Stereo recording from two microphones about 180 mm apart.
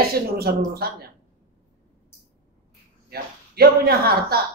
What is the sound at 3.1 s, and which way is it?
Speech, 60° right (ahead or behind).